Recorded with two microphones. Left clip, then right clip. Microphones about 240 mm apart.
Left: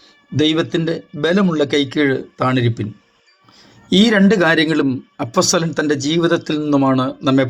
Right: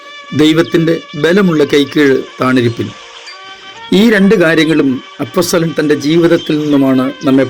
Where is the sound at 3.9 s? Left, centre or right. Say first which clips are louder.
Right 5 dB; centre.